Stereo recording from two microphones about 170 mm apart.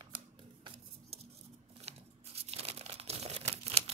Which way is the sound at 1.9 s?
40° right (ahead or behind).